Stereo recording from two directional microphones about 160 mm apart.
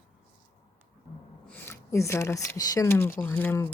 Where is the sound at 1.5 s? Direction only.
15° left (ahead or behind).